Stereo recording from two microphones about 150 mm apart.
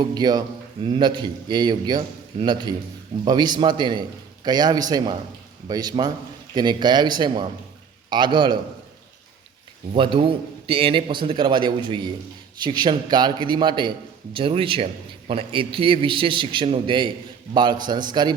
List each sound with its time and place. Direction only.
0.0 s a man's voice: 30° right (ahead or behind)
9.9 s a man's voice: 35° right (ahead or behind)